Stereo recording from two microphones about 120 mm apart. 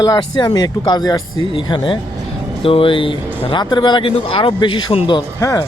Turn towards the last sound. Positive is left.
turn(degrees=30)  # may be behind; listen again after turning